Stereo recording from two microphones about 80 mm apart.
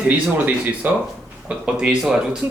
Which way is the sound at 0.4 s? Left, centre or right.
Right.